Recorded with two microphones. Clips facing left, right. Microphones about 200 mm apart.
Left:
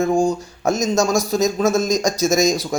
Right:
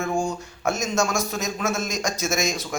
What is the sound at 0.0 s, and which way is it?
Speech, 35° left (ahead or behind).